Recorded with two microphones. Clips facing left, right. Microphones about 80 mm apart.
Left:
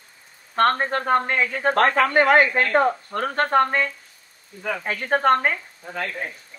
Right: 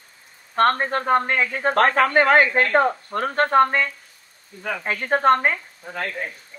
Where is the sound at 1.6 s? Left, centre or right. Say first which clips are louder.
Right 1 dB; right.